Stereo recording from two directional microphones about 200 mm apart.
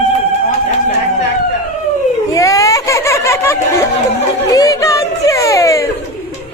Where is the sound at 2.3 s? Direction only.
15° left (ahead or behind).